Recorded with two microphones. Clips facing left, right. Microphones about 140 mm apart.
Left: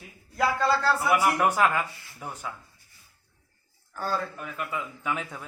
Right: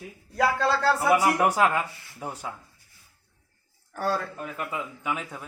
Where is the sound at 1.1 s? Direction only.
25° right (ahead or behind).